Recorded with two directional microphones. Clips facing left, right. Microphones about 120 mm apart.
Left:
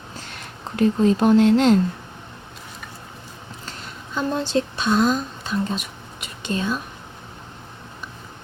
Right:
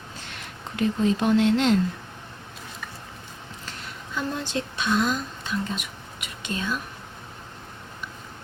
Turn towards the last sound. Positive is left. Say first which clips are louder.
# left 5 dB
turn(degrees=35)  # may be behind; listen again after turning